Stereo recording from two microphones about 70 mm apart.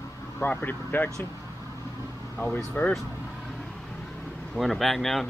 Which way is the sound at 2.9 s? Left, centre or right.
Centre.